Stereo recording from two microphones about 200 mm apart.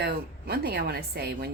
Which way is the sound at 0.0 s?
50° right (ahead or behind).